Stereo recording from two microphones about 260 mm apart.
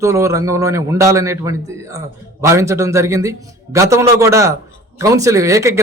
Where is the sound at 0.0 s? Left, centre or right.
Centre.